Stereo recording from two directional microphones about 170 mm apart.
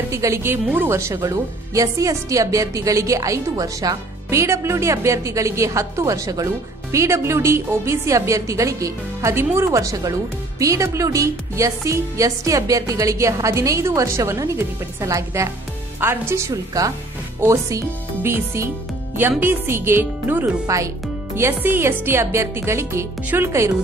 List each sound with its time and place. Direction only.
0.1 s speech: 15° right (ahead or behind)